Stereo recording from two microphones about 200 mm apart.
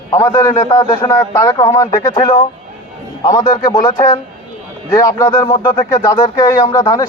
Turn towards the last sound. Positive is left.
turn(degrees=15)  # may be behind; listen again after turning